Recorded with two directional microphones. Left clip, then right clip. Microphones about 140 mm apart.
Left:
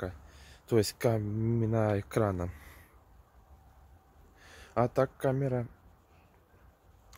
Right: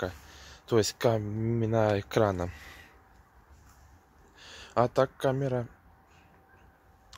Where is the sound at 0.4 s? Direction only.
20° left (ahead or behind).